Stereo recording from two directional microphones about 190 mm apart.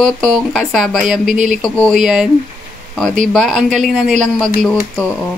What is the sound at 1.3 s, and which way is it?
Speech, 40° right (ahead or behind).